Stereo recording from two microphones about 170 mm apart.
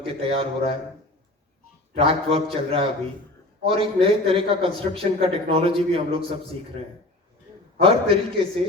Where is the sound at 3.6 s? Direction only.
35° right (ahead or behind).